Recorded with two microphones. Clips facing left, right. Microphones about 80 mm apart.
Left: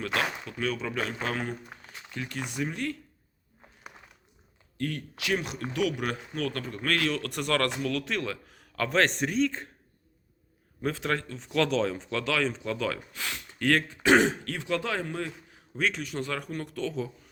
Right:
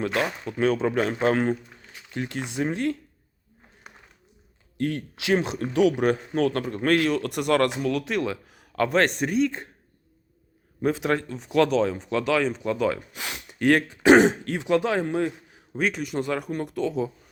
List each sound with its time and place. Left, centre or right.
0.0 s speech: right
0.4 s a man's voice: right
4.8 s speech: right; by 9.6 s centre
10.8 s speech: centre